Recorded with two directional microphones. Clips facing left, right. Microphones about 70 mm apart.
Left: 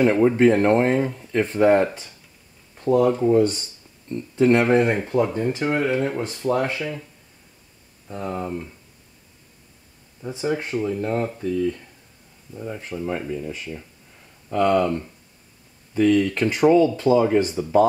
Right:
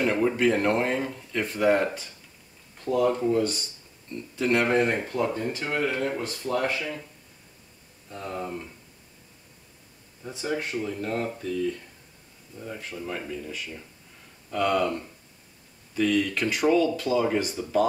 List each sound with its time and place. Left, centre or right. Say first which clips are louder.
0.0 s speech: left 7 dB; centre
4.1 s speech: left 7 dB; left
8.1 s speech: left 5 dB; left
10.2 s speech: left 5 dB; centre
16.0 s speech: left 6 dB; centre
16.3 s speech: left 5 dB; left